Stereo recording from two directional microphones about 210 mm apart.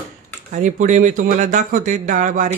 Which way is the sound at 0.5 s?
35° right (ahead or behind).